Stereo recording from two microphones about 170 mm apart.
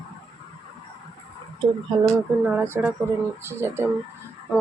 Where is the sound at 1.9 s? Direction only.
25° right (ahead or behind).